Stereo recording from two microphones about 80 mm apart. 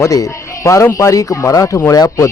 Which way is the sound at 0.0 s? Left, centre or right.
Left.